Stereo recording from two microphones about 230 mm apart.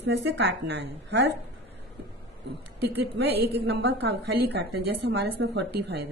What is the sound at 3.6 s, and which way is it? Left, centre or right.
A woman's voice, right.